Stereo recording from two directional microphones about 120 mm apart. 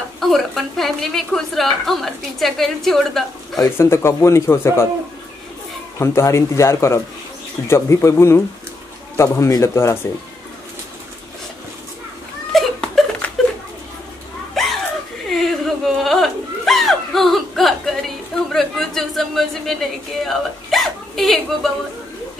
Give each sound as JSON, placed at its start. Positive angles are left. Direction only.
{"t": 0.2, "sound": "a woman's voice", "side_deg": 0}
{"t": 3.7, "sound": "speech", "side_deg": 20}
{"t": 5.9, "sound": "speech", "side_deg": 20}
{"t": 12.5, "sound": "laughter", "side_deg": 5}
{"t": 14.5, "sound": "chuckle", "side_deg": 0}
{"t": 15.2, "sound": "a sound", "side_deg": 0}